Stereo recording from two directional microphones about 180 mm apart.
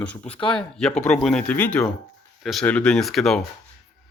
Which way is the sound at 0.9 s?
40° left (ahead or behind).